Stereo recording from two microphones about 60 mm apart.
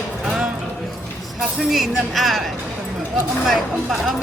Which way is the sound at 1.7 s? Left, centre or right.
Centre.